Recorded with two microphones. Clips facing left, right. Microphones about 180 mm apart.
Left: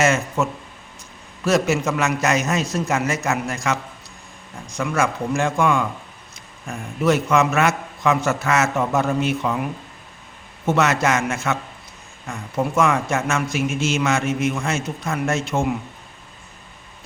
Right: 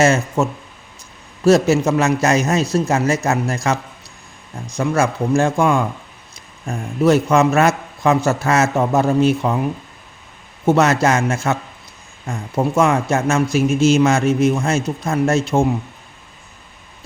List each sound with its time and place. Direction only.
0.0 s a man's voice: 35° right (ahead or behind)
1.5 s a man's voice: 35° right (ahead or behind)
10.7 s a man's voice: 35° right (ahead or behind)